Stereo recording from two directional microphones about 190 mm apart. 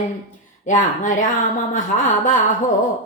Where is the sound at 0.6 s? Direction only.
40° left (ahead or behind).